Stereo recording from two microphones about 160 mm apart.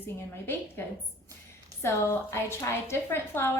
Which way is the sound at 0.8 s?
15° left (ahead or behind).